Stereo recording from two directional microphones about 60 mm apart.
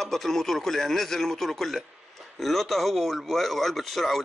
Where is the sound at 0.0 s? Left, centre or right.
Centre.